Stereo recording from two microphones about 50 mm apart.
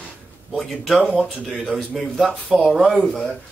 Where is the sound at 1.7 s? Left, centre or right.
Centre.